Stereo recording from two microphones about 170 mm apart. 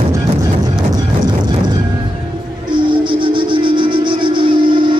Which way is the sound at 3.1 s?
30° right (ahead or behind).